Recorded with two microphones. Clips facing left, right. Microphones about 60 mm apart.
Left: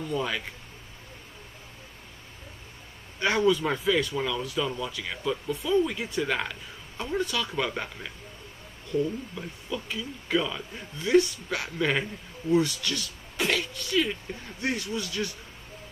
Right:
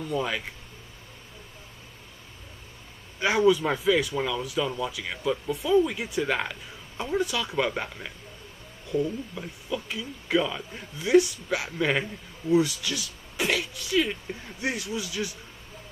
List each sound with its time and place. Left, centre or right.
0.1 s a man's voice: centre
3.2 s a man's voice: centre
9.4 s a man's voice: centre